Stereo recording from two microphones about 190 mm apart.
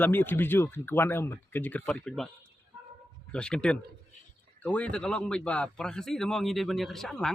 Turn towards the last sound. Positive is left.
turn(degrees=5)  # may be behind; listen again after turning